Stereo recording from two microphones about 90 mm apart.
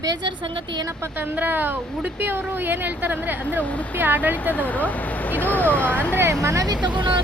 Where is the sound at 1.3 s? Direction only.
20° right (ahead or behind).